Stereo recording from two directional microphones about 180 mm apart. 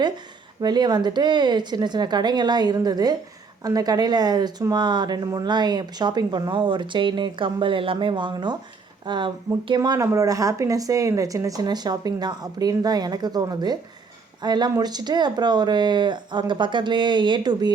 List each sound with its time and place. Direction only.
0.6 s speech: 25° right (ahead or behind)